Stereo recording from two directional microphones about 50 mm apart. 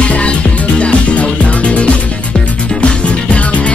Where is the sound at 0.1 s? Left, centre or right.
Left.